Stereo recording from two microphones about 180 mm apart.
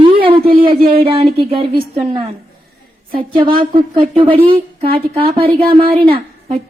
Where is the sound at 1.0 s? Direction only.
30° right (ahead or behind).